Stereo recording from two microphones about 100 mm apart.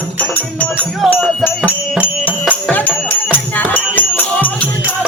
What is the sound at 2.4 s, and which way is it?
Music, 15° left (ahead or behind).